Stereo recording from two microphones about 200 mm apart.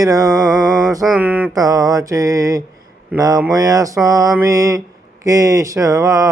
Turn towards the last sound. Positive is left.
turn(degrees=-15)  # may be behind; listen again after turning